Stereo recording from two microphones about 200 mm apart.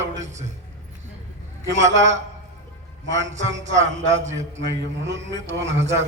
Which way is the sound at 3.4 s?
65° right (ahead or behind).